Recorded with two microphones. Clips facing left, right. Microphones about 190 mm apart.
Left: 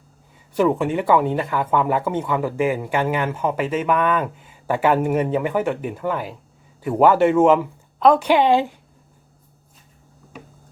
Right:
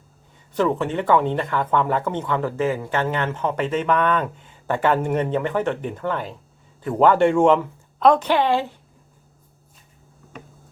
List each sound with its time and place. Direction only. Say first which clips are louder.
0.5 s speech: left 2 dB; 10° left (ahead or behind)
8.3 s speech: left 3 dB; 15° left (ahead or behind)